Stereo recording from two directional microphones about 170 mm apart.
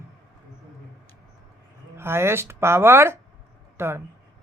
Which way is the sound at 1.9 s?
15° right (ahead or behind).